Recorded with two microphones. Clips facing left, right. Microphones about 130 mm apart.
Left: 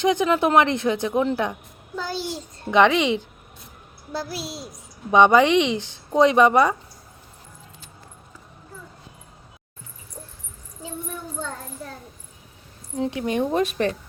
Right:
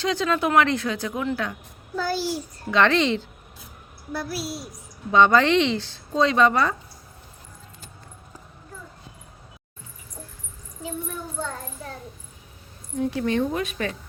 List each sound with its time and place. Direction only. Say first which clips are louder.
0.0 s a woman's voice: left 4 dB; 20° left (ahead or behind)
4.1 s a woman's voice: even; 25° left (ahead or behind)
13.0 s a woman's voice: even; 20° left (ahead or behind)
13.5 s speech: left 5 dB; 40° left (ahead or behind)